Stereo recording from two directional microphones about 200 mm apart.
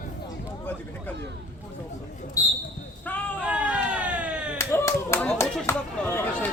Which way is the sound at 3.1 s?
10° left (ahead or behind).